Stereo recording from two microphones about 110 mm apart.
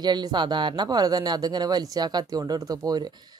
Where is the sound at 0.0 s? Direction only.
40° right (ahead or behind).